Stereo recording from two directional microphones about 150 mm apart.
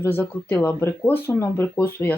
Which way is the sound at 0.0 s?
10° left (ahead or behind).